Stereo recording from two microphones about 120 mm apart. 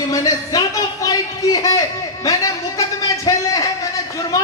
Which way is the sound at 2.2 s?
30° left (ahead or behind).